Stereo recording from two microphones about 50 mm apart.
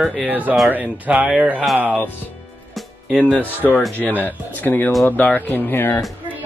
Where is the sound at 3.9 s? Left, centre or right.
Left.